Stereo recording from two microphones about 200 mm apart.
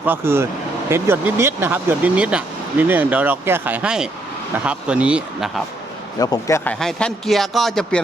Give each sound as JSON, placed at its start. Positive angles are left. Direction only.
{"t": 0.0, "sound": "speech", "side_deg": -10}
{"t": 6.1, "sound": "a man's voice", "side_deg": 15}
{"t": 6.7, "sound": "speech", "side_deg": 0}